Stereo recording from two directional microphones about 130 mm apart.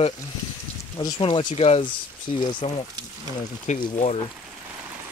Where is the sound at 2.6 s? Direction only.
60° left (ahead or behind).